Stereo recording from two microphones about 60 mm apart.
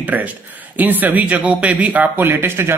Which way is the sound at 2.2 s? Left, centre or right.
Right.